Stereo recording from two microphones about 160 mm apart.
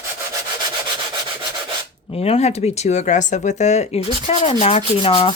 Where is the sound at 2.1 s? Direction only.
40° left (ahead or behind).